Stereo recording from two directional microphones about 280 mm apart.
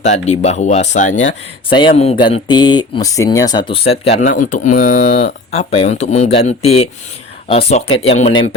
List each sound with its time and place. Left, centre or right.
0.0 s speech: left